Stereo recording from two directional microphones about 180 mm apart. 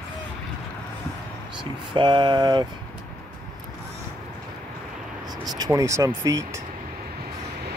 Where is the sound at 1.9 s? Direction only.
25° right (ahead or behind).